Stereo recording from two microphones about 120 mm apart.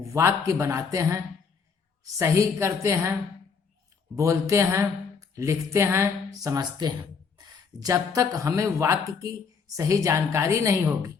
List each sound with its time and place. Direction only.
0.0 s speech: 25° right (ahead or behind)
4.1 s speech: 25° right (ahead or behind)